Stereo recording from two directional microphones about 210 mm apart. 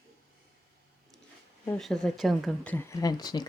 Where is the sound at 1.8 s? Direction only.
Centre (ahead or behind); by 3.5 s 20° left (ahead or behind).